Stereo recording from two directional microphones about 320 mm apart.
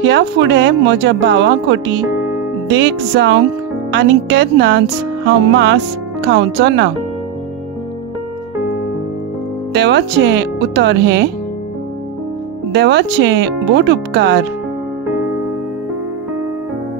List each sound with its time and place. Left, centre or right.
0.0 s speech: right
9.8 s speech: right
12.7 s speech: right